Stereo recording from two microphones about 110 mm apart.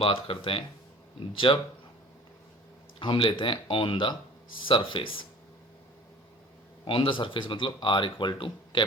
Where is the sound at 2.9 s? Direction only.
50° left (ahead or behind).